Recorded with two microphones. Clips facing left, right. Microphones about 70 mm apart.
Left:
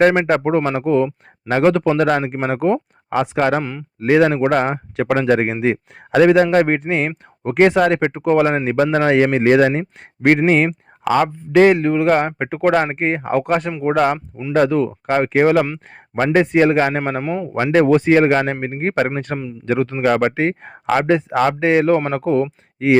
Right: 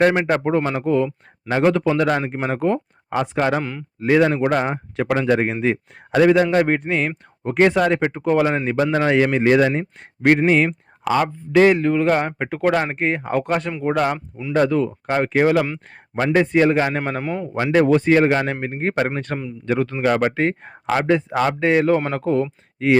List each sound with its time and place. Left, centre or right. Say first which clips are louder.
0.1 s a man's voice: left 3 dB; left
1.5 s a man's voice: left 3 dB; left
3.1 s speech: left 3 dB; left
3.6 s a man's voice: left 2 dB; centre
4.0 s a man's voice: left 2 dB; left
7.4 s speech: left 3 dB; left
8.3 s speech: left 3 dB; left
8.7 s a man's voice: left 3 dB; left
10.2 s a man's voice: left 2 dB; left
17.0 s a man's voice: left 3 dB; left
17.2 s a man's voice: left 3 dB; centre
17.7 s a man's voice: left 2 dB; left
18.0 s a man's voice: left 2 dB; left
21.2 s a man's voice: left 3 dB; left